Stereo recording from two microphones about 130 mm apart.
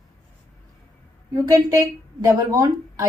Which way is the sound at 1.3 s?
25° right (ahead or behind).